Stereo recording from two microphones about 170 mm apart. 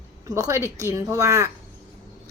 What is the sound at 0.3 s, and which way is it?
Speech, 20° right (ahead or behind).